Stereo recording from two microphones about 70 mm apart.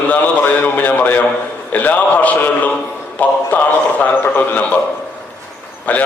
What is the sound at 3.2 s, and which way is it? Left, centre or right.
A man's voice, left.